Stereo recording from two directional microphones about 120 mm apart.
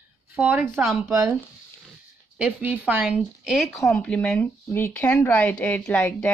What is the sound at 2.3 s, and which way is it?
Speech, 15° right (ahead or behind).